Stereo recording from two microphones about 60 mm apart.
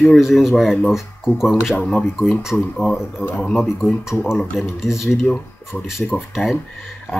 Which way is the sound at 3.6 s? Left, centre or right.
Centre.